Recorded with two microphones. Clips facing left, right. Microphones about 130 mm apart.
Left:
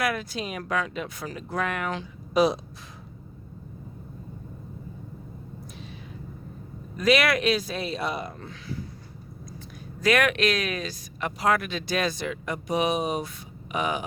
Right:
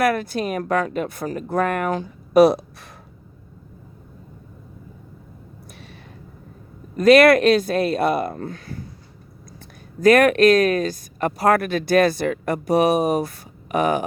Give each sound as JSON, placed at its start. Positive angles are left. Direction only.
{"t": 0.0, "sound": "speech", "side_deg": -55}
{"t": 6.9, "sound": "speech", "side_deg": -50}
{"t": 10.0, "sound": "speech", "side_deg": -50}